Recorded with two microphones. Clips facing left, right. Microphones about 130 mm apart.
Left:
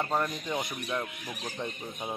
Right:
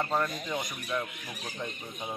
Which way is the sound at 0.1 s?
10° left (ahead or behind).